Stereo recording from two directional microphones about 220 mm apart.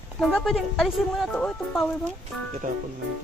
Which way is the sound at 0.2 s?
5° left (ahead or behind).